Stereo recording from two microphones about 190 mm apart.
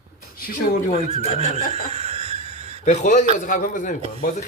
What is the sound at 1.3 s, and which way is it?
Laughter, 35° right (ahead or behind).